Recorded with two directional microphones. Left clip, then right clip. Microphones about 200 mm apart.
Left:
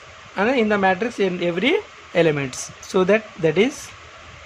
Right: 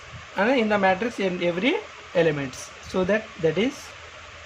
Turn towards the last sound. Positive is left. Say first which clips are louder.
# left 5 dB
turn(degrees=30)  # may be behind; listen again after turning